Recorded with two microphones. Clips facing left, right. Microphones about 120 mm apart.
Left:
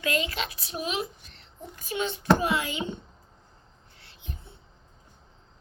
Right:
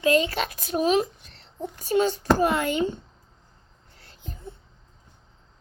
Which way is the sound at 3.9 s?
40° right (ahead or behind).